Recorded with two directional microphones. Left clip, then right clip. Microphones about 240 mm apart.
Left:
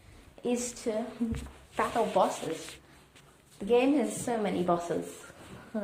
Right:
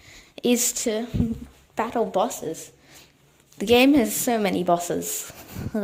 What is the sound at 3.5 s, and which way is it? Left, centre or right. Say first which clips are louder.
A woman's voice: right 8 dB; right.